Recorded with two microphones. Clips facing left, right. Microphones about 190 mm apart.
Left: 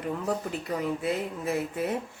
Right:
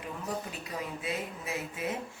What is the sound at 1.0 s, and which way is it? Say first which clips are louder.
Speech: left 6 dB; 60° left (ahead or behind).